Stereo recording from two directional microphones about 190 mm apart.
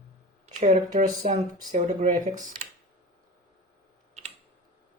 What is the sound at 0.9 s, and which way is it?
Speech, 40° right (ahead or behind).